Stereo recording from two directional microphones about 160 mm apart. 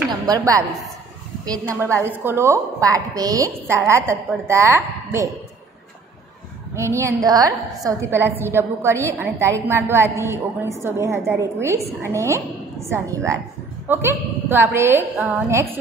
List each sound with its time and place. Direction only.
0.3 s a woman's voice: 20° right (ahead or behind)
1.8 s a woman's voice: 15° right (ahead or behind)
6.7 s a woman's voice: 15° right (ahead or behind)